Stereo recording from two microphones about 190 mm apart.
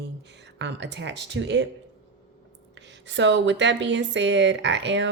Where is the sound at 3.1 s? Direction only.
70° right (ahead or behind).